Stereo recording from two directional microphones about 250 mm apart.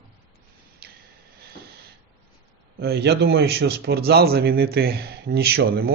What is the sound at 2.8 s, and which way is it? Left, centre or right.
A man's voice, right.